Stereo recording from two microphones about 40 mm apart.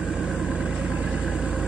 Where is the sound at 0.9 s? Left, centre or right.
Right.